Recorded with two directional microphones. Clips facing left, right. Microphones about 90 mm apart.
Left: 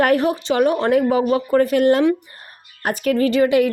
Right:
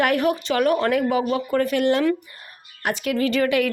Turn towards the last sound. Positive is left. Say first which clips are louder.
# left 5 dB
turn(degrees=30)  # may be behind; listen again after turning